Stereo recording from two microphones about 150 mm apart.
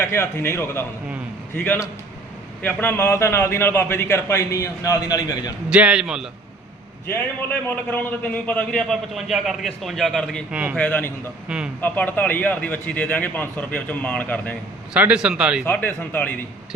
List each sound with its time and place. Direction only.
0.0 s a man's voice: 15° left (ahead or behind)
5.7 s a man's voice: 5° right (ahead or behind)
7.1 s a man's voice: 10° left (ahead or behind)
10.5 s speech: 10° right (ahead or behind)
10.8 s a man's voice: 10° left (ahead or behind)
11.4 s a man's voice: 5° right (ahead or behind)
11.8 s a man's voice: 10° left (ahead or behind)
14.9 s speech: 5° right (ahead or behind)
15.6 s a man's voice: 15° left (ahead or behind)